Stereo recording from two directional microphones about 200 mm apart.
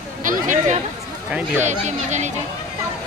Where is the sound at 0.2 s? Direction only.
40° right (ahead or behind).